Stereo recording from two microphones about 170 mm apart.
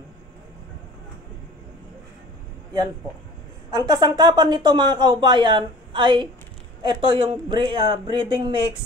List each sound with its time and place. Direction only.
3.7 s speech: 25° right (ahead or behind)